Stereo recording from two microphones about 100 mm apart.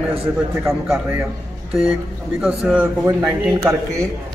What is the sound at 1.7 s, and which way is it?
Speech, 5° right (ahead or behind).